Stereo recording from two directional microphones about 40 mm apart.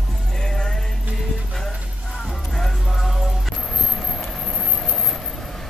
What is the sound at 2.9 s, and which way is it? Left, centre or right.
Music, centre.